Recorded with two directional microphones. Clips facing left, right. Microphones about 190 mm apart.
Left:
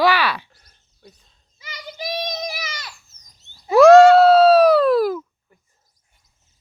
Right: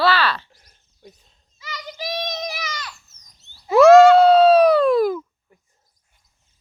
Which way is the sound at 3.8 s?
Centre (ahead or behind).